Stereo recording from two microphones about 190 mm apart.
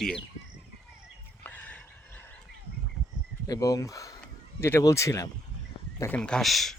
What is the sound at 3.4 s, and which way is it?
Speech, 20° left (ahead or behind).